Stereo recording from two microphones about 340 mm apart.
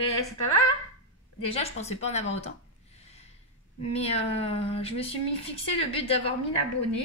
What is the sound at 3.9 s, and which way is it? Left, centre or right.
A woman's voice, centre.